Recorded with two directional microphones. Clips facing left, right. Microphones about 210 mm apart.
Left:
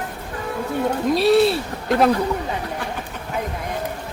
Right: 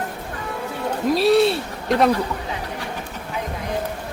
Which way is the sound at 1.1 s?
Centre (ahead or behind).